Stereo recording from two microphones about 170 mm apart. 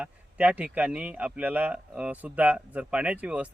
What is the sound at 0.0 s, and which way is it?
Speech, 10° right (ahead or behind).